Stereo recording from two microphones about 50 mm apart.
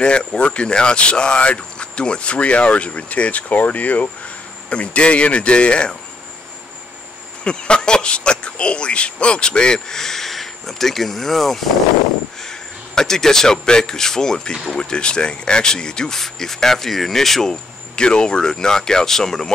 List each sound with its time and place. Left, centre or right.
0.0 s speech: centre
7.4 s speech: centre